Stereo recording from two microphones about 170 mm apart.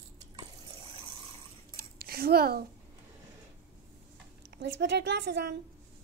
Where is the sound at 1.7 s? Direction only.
65° right (ahead or behind).